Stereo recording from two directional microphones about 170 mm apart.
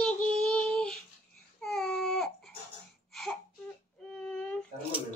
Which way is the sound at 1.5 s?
5° left (ahead or behind).